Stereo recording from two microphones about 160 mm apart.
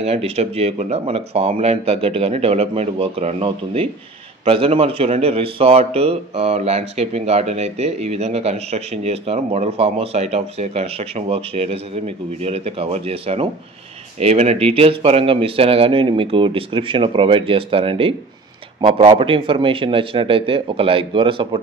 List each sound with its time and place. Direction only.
0.0 s a man's voice: 40° right (ahead or behind)